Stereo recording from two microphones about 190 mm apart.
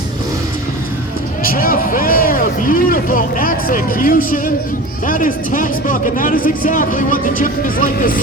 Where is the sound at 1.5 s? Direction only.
50° left (ahead or behind).